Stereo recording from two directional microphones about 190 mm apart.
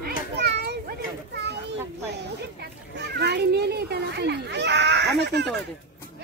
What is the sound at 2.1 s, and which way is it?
Children playing, 60° right (ahead or behind).